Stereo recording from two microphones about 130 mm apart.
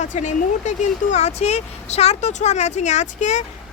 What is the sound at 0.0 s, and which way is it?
A woman's voice, 65° left (ahead or behind).